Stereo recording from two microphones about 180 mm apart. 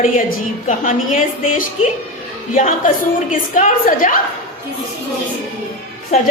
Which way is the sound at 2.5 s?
45° left (ahead or behind).